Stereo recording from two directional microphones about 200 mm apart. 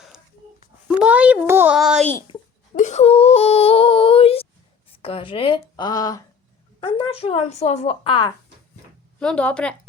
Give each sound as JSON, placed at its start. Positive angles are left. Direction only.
{"t": 0.9, "sound": "a child's voice", "side_deg": -5}
{"t": 2.7, "sound": "speech", "side_deg": 35}
{"t": 9.1, "sound": "speech", "side_deg": 5}